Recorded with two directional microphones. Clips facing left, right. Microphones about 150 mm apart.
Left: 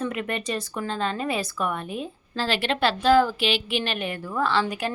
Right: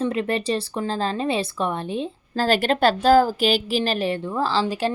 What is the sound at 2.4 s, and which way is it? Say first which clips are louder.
A woman's voice: right 5 dB; 45° right (ahead or behind).